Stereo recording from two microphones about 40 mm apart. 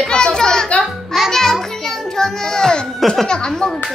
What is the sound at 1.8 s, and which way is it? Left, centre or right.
Child singing, centre.